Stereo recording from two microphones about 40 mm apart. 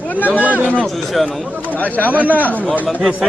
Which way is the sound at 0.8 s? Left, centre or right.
Centre.